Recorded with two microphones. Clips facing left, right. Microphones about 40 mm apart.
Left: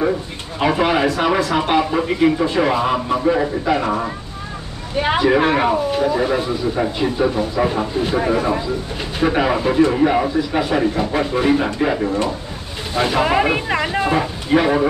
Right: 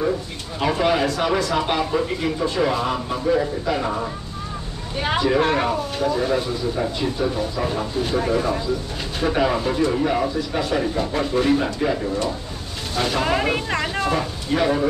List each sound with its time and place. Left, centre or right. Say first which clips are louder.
0.6 s speech: left 3 dB; left